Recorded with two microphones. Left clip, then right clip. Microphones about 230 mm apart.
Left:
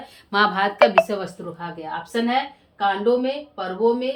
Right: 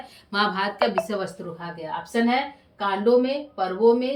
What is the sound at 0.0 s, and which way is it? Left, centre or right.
A woman's voice, centre.